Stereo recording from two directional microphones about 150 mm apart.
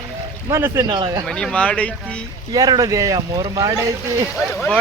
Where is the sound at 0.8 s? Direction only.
30° right (ahead or behind).